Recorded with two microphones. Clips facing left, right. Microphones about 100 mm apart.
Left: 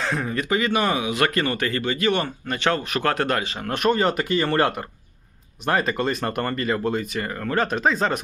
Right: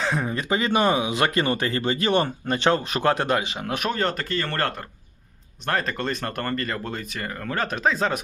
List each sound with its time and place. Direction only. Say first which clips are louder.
0.0 s speech: even; 15° right (ahead or behind)
0.4 s speech: right 1 dB; 25° right (ahead or behind)
3.7 s speech: left 6 dB; 5° right (ahead or behind)